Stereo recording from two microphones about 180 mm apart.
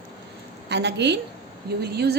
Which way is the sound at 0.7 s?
70° right (ahead or behind).